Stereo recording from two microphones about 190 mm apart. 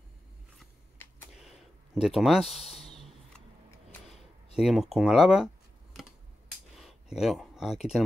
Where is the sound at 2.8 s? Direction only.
30° left (ahead or behind).